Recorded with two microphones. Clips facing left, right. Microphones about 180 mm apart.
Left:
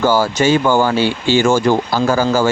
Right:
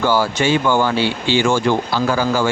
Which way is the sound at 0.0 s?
45° left (ahead or behind).